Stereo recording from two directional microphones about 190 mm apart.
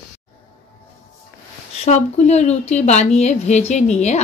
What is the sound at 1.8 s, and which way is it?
A woman's voice, 35° left (ahead or behind).